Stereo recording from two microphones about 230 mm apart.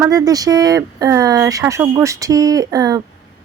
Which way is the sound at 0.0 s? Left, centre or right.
Centre.